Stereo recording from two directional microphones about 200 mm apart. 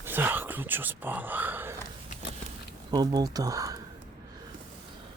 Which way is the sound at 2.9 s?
20° right (ahead or behind).